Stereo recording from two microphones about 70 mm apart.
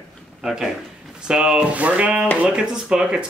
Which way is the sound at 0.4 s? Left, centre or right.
Centre.